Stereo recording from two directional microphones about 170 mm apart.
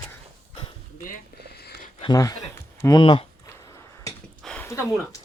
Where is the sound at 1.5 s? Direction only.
70° left (ahead or behind).